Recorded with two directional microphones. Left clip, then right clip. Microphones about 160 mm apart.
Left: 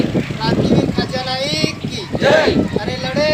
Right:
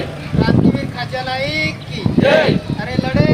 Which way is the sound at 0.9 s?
5° left (ahead or behind).